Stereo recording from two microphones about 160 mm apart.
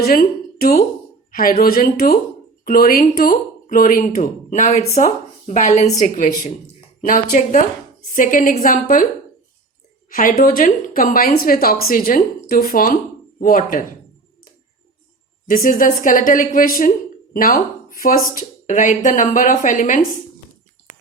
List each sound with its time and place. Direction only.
0.0 s a woman's voice: 70° left (ahead or behind)
10.1 s speech: 55° left (ahead or behind)
15.4 s speech: 60° left (ahead or behind)